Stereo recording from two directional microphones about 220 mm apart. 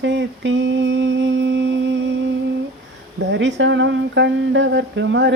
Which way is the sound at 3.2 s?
55° right (ahead or behind).